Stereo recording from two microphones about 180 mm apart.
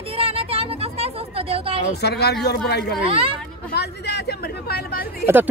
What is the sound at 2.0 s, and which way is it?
Speech, 65° left (ahead or behind).